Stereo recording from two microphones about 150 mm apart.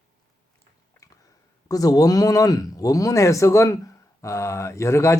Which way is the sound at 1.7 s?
25° left (ahead or behind).